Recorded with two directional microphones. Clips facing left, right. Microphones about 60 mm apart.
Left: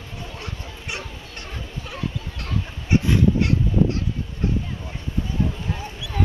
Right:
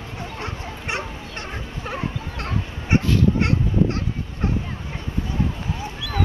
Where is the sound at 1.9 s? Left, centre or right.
Right.